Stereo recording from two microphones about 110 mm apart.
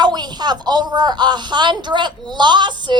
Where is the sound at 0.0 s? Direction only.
40° right (ahead or behind).